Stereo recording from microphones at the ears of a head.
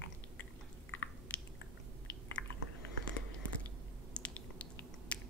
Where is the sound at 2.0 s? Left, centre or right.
Left.